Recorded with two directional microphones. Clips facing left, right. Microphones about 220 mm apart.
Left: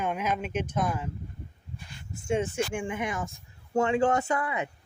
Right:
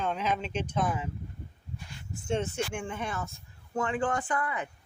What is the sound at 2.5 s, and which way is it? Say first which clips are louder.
Speech: left 4 dB; 10° left (ahead or behind).